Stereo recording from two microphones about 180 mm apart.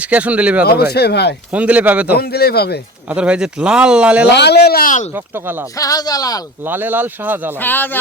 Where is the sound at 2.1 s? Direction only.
60° left (ahead or behind).